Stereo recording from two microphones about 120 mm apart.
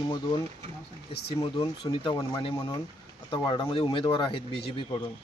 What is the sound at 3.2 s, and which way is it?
A man's voice, 45° left (ahead or behind).